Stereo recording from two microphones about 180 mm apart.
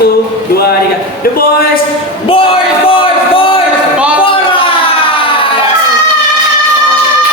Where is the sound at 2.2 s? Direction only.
30° left (ahead or behind).